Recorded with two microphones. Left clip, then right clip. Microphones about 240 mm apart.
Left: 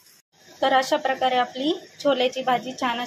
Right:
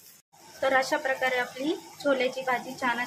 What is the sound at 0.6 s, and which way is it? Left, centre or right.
A woman's voice, centre.